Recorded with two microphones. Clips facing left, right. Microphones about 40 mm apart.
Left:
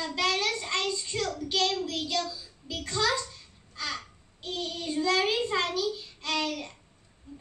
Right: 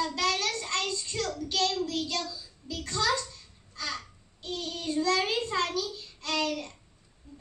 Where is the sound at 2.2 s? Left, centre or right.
Centre.